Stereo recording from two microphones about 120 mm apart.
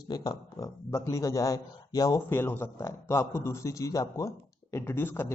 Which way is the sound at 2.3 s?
20° left (ahead or behind).